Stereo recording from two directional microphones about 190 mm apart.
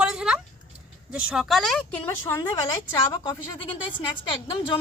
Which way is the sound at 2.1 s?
15° left (ahead or behind).